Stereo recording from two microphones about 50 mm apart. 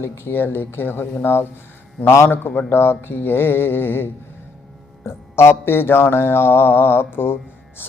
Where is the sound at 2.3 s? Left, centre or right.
Left.